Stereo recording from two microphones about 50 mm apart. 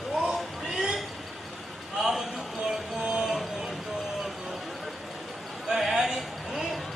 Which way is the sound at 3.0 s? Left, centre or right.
Centre.